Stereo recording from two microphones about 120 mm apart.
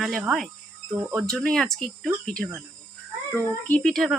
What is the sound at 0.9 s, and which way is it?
Speech, 25° right (ahead or behind).